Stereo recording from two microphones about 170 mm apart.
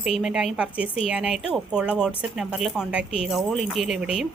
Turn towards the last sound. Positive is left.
turn(degrees=-5)  # may be behind; listen again after turning